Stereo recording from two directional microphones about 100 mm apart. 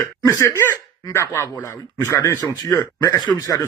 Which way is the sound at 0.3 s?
35° left (ahead or behind).